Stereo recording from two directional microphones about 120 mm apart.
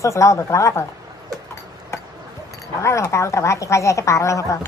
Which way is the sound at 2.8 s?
25° left (ahead or behind).